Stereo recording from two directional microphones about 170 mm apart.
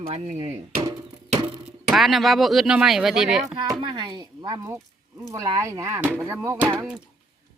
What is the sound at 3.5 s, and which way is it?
Speech, 25° right (ahead or behind).